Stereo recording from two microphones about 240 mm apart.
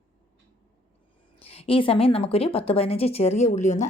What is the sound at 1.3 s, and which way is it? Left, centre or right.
Speech, left.